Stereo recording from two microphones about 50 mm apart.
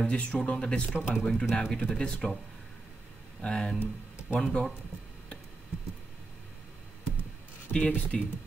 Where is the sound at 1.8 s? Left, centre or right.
Left.